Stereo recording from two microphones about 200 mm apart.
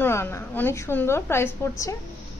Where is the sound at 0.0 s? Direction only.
10° left (ahead or behind).